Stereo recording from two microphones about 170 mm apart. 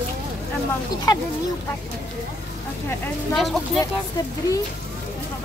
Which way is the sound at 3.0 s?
Centre (ahead or behind).